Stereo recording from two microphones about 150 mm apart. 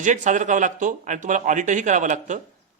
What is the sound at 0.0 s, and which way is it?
A man's voice, 55° right (ahead or behind).